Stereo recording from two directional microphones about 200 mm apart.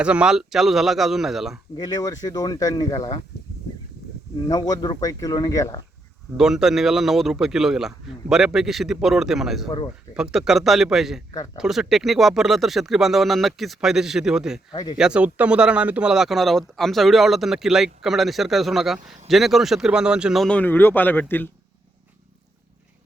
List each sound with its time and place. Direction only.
0.0 s speech: 5° right (ahead or behind)
1.8 s speech: 20° left (ahead or behind)
4.4 s speech: 20° left (ahead or behind)
6.3 s speech: centre (ahead or behind)
14.7 s speech: 20° left (ahead or behind)
14.9 s speech: 5° right (ahead or behind)